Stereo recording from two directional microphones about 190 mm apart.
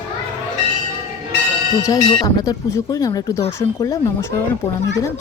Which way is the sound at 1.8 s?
20° left (ahead or behind).